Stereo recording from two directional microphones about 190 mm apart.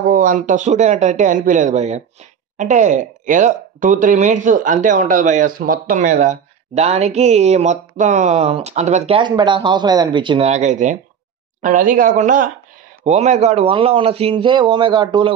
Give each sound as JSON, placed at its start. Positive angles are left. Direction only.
{"t": 0.1, "sound": "speech", "side_deg": -45}
{"t": 10.5, "sound": "speech", "side_deg": -40}